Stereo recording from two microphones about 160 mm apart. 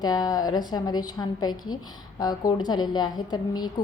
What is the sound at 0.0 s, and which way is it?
A woman's voice, 25° left (ahead or behind).